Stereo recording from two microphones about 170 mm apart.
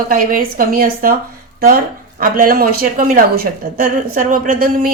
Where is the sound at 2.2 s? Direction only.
55° right (ahead or behind).